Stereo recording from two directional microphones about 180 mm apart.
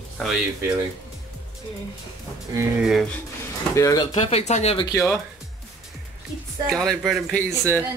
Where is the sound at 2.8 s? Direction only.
Centre (ahead or behind).